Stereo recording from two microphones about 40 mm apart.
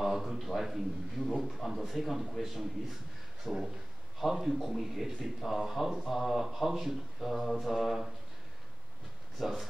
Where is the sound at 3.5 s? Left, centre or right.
Centre.